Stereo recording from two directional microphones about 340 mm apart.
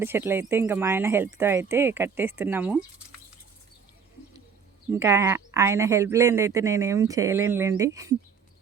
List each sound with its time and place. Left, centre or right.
0.0 s speech: centre
4.9 s speech: centre